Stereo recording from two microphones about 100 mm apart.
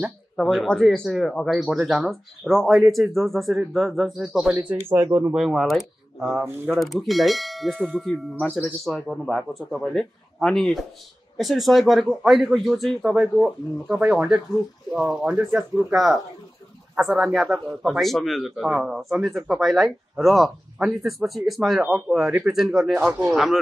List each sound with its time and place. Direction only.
0.0 s speech: centre (ahead or behind)
4.2 s speech: 10° right (ahead or behind)
4.6 s speech: 25° right (ahead or behind)
5.3 s speech: centre (ahead or behind)
6.4 s speech: 20° right (ahead or behind)
6.8 s speech: centre (ahead or behind)
22.9 s speech: 15° right (ahead or behind)
23.3 s speech: 5° right (ahead or behind)